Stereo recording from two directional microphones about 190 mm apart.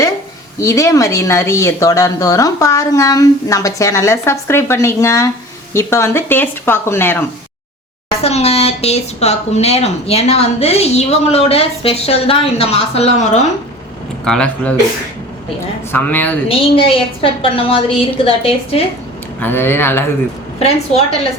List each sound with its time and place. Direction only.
0.6 s speech: 15° left (ahead or behind)
8.2 s speech: 35° left (ahead or behind)
14.3 s speech: 5° left (ahead or behind)
15.9 s speech: 10° left (ahead or behind)
16.5 s a woman's voice: 30° left (ahead or behind)
19.4 s speech: 10° left (ahead or behind)
20.6 s speech: 30° left (ahead or behind)